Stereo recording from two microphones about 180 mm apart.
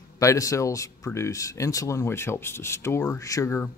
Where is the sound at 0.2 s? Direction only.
15° left (ahead or behind).